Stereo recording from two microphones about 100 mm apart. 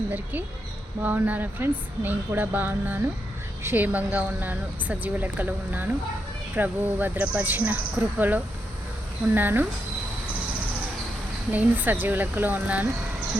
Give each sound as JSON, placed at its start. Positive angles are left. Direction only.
{"t": 1.0, "sound": "a woman's voice", "side_deg": -15}
{"t": 11.5, "sound": "speech", "side_deg": -20}